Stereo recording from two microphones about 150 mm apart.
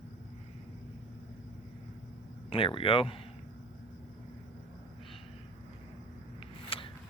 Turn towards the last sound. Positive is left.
turn(degrees=40)  # may be behind; listen again after turning